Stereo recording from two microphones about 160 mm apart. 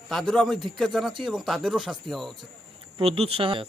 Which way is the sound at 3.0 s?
40° right (ahead or behind).